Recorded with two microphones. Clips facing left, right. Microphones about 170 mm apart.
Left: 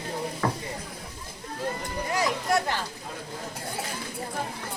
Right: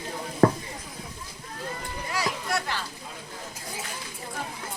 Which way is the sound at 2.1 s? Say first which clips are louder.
Left 4 dB; 45° left (ahead or behind).